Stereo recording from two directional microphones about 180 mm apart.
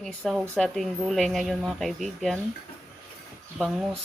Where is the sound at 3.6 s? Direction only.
Centre (ahead or behind).